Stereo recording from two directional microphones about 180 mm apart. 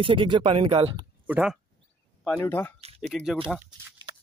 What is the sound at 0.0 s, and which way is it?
Speech, 30° right (ahead or behind).